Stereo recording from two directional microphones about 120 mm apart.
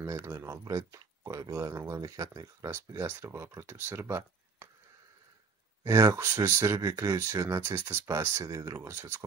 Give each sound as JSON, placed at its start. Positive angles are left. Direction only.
{"t": 0.0, "sound": "speech", "side_deg": -25}
{"t": 5.9, "sound": "speech", "side_deg": -25}